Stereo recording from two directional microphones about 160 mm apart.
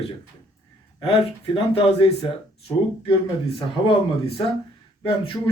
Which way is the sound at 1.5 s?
35° left (ahead or behind).